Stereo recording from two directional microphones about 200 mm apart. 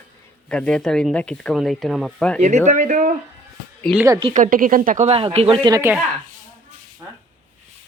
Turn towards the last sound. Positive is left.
turn(degrees=-15)  # may be behind; listen again after turning